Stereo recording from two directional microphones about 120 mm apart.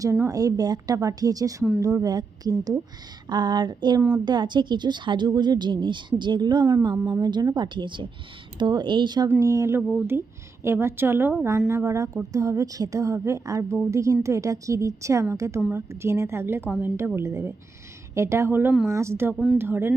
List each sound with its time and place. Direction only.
0.0 s a woman's voice: 25° right (ahead or behind)
9.4 s a woman's voice: 25° right (ahead or behind)